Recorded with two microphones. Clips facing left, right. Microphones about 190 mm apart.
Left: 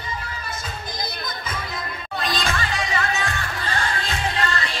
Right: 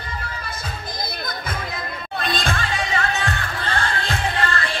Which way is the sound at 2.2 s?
55° right (ahead or behind).